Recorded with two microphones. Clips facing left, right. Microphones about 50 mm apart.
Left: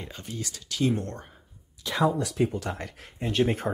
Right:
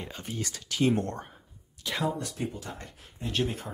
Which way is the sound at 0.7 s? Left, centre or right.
Right.